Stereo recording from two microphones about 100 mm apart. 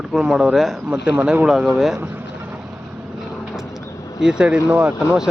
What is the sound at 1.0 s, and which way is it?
Speech, 15° right (ahead or behind).